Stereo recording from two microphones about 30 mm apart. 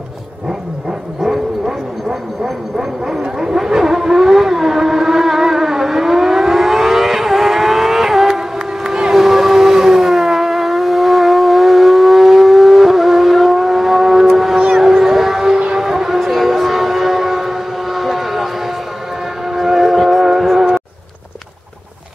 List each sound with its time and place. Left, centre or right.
1.2 s vehicle: centre
8.8 s a sound: right
9.1 s civil defense siren: centre
14.3 s foghorn: centre
14.8 s howl: centre
15.9 s train: centre
19.5 s a sound: centre
20.3 s music: centre